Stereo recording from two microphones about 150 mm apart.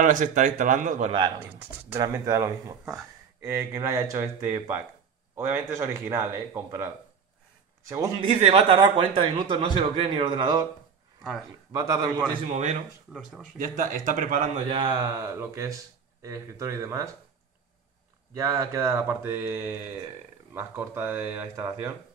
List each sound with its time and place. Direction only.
0.0 s a man's voice: 60° right (ahead or behind)
1.4 s speech: 10° right (ahead or behind)
7.9 s speech: 20° right (ahead or behind)
8.3 s speech: 45° right (ahead or behind)
11.7 s speech: 25° right (ahead or behind)
13.1 s speech: centre (ahead or behind)
13.6 s a man's voice: 65° right (ahead or behind)
14.7 s speech: 35° right (ahead or behind)
15.0 s speech: 20° right (ahead or behind)
18.3 s speech: 20° right (ahead or behind)